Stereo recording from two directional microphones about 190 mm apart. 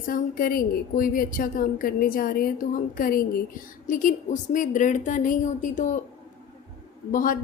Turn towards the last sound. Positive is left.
turn(degrees=45)  # may be behind; listen again after turning